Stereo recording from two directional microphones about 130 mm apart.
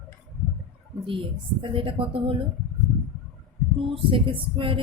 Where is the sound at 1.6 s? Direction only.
40° right (ahead or behind).